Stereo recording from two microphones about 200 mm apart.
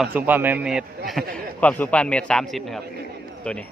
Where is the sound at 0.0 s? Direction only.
10° right (ahead or behind).